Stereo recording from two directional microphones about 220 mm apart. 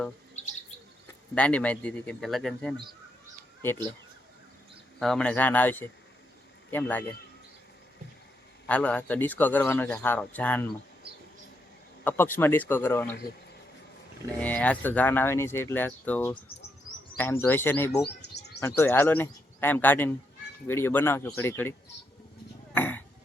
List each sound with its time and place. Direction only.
1.4 s speech: 5° left (ahead or behind)
4.9 s a man's voice: centre (ahead or behind)
8.6 s a man's voice: 5° left (ahead or behind)
12.0 s a man's voice: 10° left (ahead or behind)
14.3 s a man's voice: 5° left (ahead or behind)
18.2 s bird: 50° left (ahead or behind)
18.6 s a man's voice: 10° left (ahead or behind)
22.7 s a sound: 10° left (ahead or behind)